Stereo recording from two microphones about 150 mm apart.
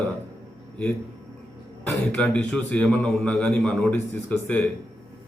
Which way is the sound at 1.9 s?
5° left (ahead or behind).